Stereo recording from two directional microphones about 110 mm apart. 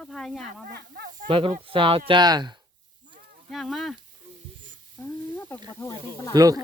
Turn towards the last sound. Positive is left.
turn(degrees=-35)  # may be behind; listen again after turning